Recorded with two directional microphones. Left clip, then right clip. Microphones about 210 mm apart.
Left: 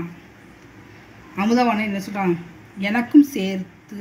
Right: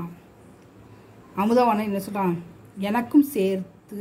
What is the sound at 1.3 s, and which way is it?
Speech, 40° right (ahead or behind).